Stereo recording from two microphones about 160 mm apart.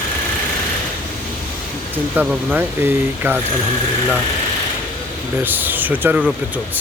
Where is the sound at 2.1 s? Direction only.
5° right (ahead or behind).